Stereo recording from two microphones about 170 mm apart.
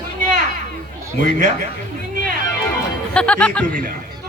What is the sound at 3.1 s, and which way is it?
Speech, 5° left (ahead or behind).